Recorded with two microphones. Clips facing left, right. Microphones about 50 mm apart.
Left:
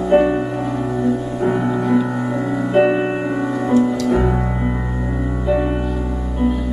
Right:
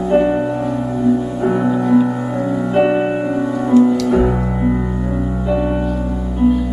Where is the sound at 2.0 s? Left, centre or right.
Centre.